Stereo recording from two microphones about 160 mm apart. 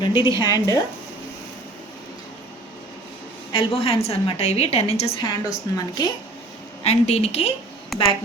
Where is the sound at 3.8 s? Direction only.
40° left (ahead or behind).